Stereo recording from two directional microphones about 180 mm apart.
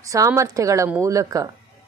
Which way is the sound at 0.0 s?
20° right (ahead or behind).